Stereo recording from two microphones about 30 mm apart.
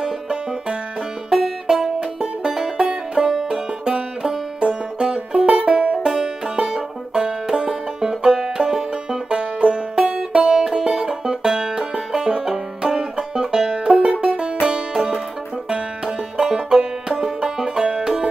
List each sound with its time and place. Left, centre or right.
1.3 s music: centre
2.0 s music: right
6.2 s banjo: right
8.0 s music: right
8.3 s banjo: centre
9.3 s music: right
14.7 s music: right
16.3 s banjo: right